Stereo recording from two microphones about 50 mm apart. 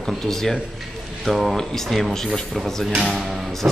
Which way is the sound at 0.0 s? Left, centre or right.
Centre.